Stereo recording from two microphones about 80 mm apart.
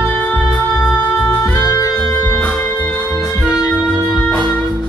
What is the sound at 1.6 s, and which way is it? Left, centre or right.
Music, left.